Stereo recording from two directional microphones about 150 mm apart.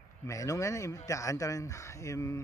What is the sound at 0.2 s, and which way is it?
Speech, 20° left (ahead or behind).